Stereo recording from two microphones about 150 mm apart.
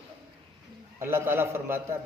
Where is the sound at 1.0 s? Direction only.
15° right (ahead or behind).